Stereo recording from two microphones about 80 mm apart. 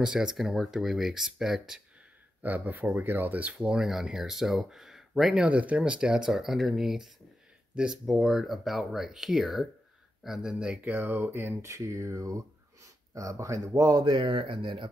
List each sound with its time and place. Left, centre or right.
0.0 s speech: centre
2.4 s speech: right
10.8 s speech: right
11.7 s speech: right
14.1 s speech: right